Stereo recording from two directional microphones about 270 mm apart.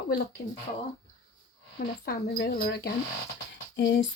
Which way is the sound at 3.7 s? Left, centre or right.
Left.